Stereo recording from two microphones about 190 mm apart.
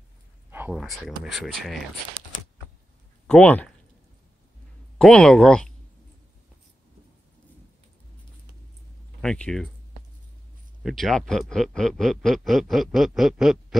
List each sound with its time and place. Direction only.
0.5 s speech: 10° right (ahead or behind)
3.3 s speech: 5° left (ahead or behind)
4.9 s speech: 5° left (ahead or behind)
9.2 s speech: 5° left (ahead or behind)
10.8 s speech: centre (ahead or behind)